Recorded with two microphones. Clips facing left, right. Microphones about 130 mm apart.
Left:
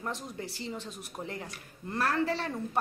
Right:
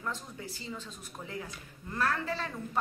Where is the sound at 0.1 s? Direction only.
75° left (ahead or behind).